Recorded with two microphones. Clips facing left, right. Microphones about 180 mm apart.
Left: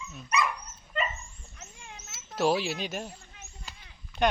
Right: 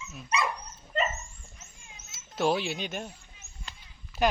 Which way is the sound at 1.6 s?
65° left (ahead or behind).